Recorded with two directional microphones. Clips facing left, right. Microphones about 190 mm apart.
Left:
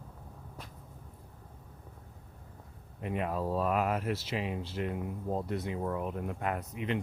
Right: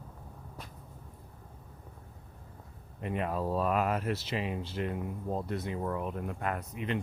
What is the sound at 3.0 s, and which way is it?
Speech, 5° left (ahead or behind).